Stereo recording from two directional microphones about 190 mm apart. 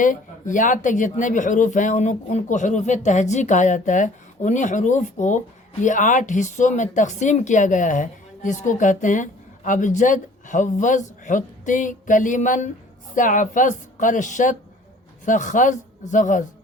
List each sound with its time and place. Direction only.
0.0 s a man's voice: 45° left (ahead or behind)